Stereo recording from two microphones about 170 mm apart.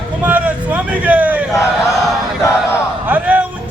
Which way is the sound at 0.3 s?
10° right (ahead or behind).